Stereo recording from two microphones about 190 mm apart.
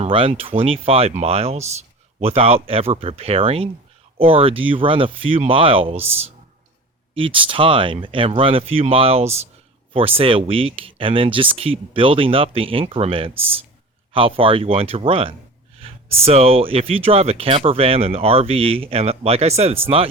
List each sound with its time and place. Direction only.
0.0 s speech: 30° right (ahead or behind)